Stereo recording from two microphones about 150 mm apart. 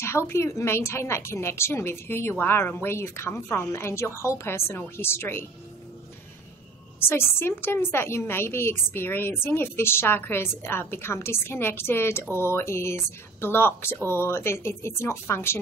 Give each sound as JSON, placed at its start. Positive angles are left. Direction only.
{"t": 0.0, "sound": "a woman's voice", "side_deg": 15}
{"t": 7.0, "sound": "a woman's voice", "side_deg": 15}